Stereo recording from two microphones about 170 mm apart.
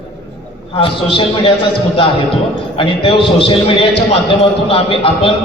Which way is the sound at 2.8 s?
35° left (ahead or behind).